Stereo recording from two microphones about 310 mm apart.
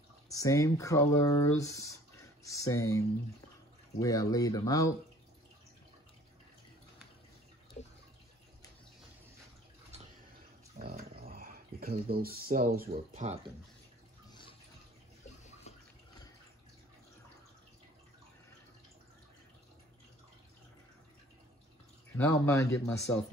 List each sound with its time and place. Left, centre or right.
0.3 s speech: centre
10.8 s speech: right
15.2 s bathtub: left
22.1 s speech: centre